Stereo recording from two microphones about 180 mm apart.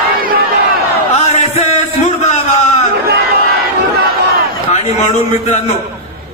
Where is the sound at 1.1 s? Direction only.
40° left (ahead or behind).